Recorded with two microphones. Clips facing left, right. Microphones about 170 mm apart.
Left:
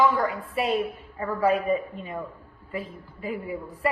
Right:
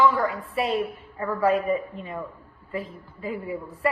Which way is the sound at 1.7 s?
25° left (ahead or behind).